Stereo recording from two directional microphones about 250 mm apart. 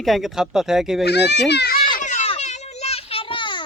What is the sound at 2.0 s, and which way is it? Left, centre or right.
Children playing, left.